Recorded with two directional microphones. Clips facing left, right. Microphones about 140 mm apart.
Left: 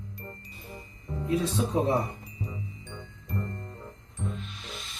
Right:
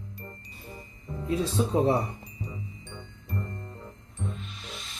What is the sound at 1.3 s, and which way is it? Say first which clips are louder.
Speech: right 1 dB; 30° right (ahead or behind).